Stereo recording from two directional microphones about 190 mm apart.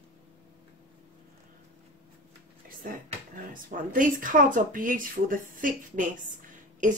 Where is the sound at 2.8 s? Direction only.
45° right (ahead or behind).